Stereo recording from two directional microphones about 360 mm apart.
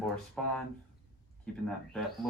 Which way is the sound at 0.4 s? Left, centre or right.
Centre.